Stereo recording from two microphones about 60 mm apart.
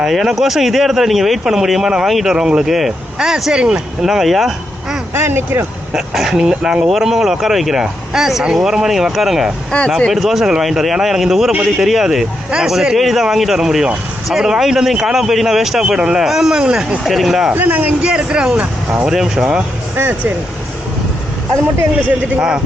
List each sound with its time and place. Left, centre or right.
0.0 s speech: centre
2.3 s speech: centre
5.1 s speech: right
5.9 s speech: centre
9.7 s speech: centre
10.1 s speech: centre
17.0 s speech: centre
17.5 s speech: right
18.0 s speech: centre
20.0 s speech: right
22.4 s speech: centre